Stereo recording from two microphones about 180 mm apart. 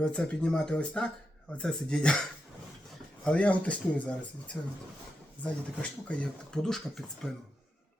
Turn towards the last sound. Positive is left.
turn(degrees=0)  # may be behind; listen again after turning